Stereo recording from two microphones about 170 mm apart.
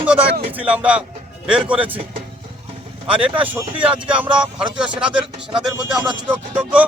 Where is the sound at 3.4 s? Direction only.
10° right (ahead or behind).